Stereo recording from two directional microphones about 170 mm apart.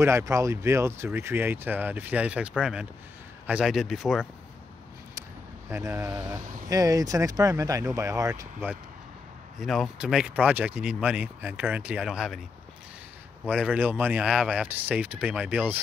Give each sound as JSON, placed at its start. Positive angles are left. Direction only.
{"t": 0.0, "sound": "speech", "side_deg": -15}
{"t": 5.7, "sound": "speech", "side_deg": -15}
{"t": 9.6, "sound": "speech", "side_deg": 0}
{"t": 13.5, "sound": "speech", "side_deg": -10}